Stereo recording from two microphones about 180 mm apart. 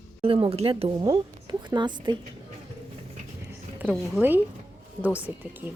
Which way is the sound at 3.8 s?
10° right (ahead or behind).